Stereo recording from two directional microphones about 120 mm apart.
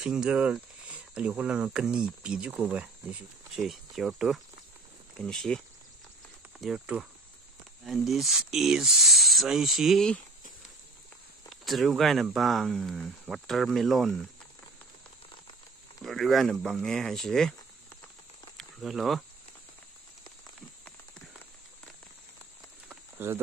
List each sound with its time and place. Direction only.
0.0 s speech: 5° right (ahead or behind)
6.6 s speech: 5° right (ahead or behind)
11.6 s speech: centre (ahead or behind)
16.0 s speech: centre (ahead or behind)
18.6 s speech: centre (ahead or behind)
22.8 s a sound: 20° right (ahead or behind)